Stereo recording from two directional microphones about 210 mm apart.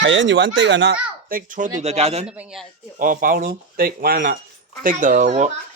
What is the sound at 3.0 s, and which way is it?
Speech, 40° right (ahead or behind).